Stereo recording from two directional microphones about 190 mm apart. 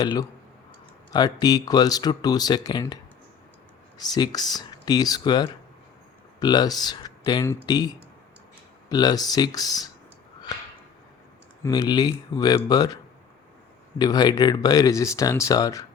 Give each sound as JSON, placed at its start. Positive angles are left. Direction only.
{"t": 0.0, "sound": "speech", "side_deg": 20}
{"t": 8.9, "sound": "speech", "side_deg": 20}
{"t": 11.6, "sound": "speech", "side_deg": 20}
{"t": 14.0, "sound": "speech", "side_deg": 20}